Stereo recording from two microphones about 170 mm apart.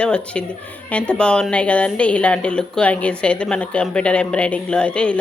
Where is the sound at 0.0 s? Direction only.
5° left (ahead or behind).